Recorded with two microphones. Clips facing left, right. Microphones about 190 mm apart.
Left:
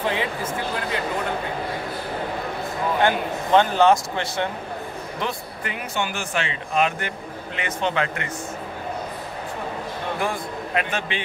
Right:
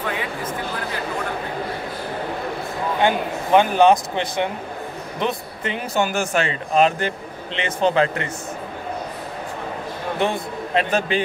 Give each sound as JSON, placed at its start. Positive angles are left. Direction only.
{"t": 0.0, "sound": "speech", "side_deg": 25}
{"t": 3.0, "sound": "speech", "side_deg": -15}
{"t": 5.9, "sound": "speech", "side_deg": -45}
{"t": 10.1, "sound": "a man's voice", "side_deg": -25}